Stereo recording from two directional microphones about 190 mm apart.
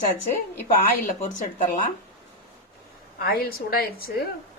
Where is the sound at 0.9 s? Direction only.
40° left (ahead or behind).